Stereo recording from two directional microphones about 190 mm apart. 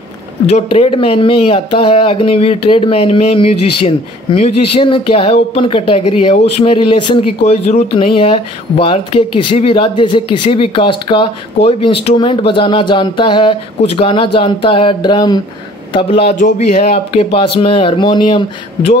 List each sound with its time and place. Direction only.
0.5 s speech: 35° left (ahead or behind)